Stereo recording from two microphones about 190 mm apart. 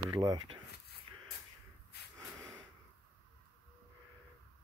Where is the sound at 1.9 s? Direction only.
60° left (ahead or behind).